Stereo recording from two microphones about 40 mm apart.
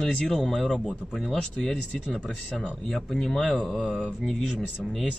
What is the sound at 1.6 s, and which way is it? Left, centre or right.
Speech, centre.